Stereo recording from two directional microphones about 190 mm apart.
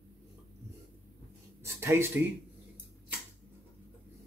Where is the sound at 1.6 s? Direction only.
15° right (ahead or behind).